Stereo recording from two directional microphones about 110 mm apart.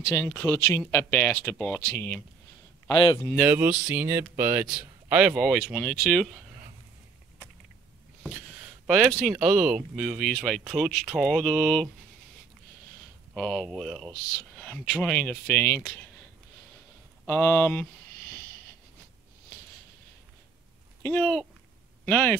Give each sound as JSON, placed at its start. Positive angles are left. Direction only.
{"t": 0.1, "sound": "speech", "side_deg": 25}
{"t": 2.9, "sound": "speech", "side_deg": 45}
{"t": 3.4, "sound": "speech", "side_deg": -20}
{"t": 4.7, "sound": "speech", "side_deg": -5}
{"t": 8.8, "sound": "speech", "side_deg": 0}
{"t": 13.3, "sound": "speech", "side_deg": 5}
{"t": 17.3, "sound": "speech", "side_deg": 15}
{"t": 21.0, "sound": "speech", "side_deg": 20}